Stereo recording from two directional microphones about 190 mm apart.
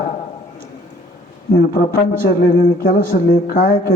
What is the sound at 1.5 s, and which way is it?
A man's voice, 50° left (ahead or behind).